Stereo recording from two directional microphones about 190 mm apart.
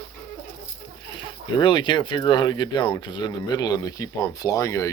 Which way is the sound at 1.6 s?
25° left (ahead or behind).